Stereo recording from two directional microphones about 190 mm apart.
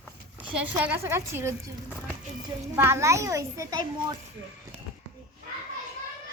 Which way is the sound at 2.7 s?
10° right (ahead or behind).